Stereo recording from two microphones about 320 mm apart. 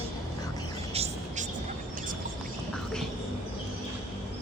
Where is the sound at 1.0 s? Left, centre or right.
Centre.